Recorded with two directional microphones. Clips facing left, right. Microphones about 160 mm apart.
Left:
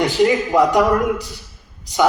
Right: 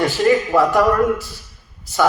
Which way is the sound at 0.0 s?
20° left (ahead or behind).